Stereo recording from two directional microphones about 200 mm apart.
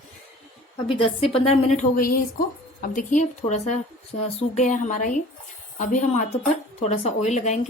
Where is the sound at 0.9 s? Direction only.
30° left (ahead or behind).